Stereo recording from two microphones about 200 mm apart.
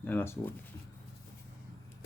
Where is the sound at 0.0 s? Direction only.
10° left (ahead or behind).